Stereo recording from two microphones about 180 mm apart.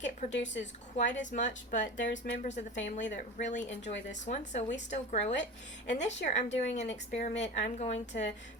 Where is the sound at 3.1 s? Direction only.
45° left (ahead or behind).